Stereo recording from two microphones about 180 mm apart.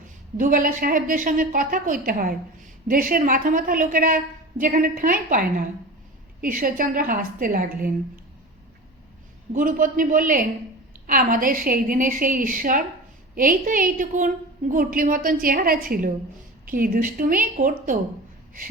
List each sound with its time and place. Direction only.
0.3 s a woman's voice: 50° right (ahead or behind)
9.5 s a woman's voice: 45° right (ahead or behind)